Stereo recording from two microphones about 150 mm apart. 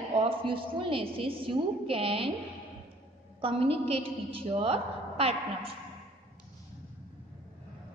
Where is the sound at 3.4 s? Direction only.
40° right (ahead or behind).